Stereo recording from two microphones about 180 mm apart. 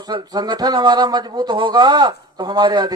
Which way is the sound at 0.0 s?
25° right (ahead or behind).